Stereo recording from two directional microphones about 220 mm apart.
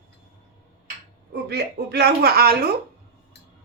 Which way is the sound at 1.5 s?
50° right (ahead or behind).